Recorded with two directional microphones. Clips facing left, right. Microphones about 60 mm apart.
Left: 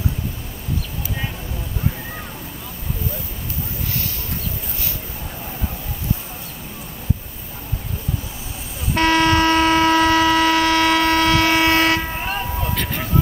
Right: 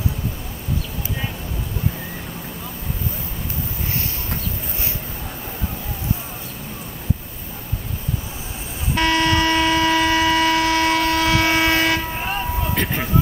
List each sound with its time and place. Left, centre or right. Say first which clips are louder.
8.9 s a sound: left 2 dB; left
12.2 s vehicle: even; centre
12.7 s vehicle: right 2 dB; centre